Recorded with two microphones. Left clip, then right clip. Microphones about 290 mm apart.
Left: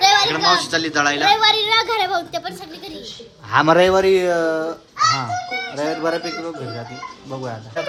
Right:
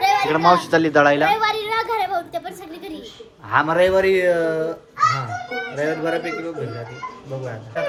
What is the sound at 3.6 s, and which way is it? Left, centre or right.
Speech, left.